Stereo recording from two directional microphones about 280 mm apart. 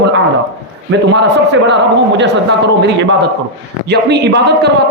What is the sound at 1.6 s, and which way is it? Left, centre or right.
A man's voice, right.